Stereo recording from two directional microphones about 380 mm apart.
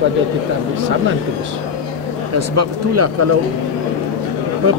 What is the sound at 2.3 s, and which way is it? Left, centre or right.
Speech, right.